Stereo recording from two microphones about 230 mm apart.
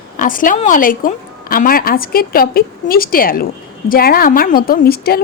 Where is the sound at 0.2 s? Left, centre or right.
Left.